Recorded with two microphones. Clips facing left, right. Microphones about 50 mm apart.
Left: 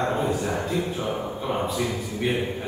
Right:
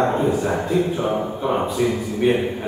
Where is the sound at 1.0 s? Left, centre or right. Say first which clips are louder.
Right 6 dB; right.